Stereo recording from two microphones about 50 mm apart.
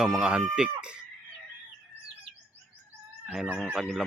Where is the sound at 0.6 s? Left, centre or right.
Centre.